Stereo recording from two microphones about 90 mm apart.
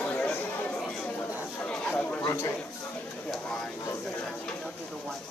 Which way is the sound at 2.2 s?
25° left (ahead or behind).